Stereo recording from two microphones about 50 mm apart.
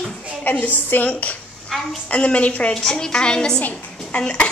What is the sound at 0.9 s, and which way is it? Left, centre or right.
A child's voice, left.